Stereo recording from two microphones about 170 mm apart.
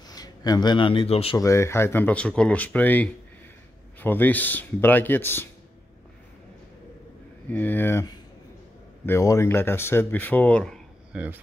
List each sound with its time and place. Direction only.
0.1 s a man's voice: 20° left (ahead or behind)
1.4 s speech: 15° left (ahead or behind)
7.5 s speech: 10° left (ahead or behind)
11.1 s speech: 10° right (ahead or behind)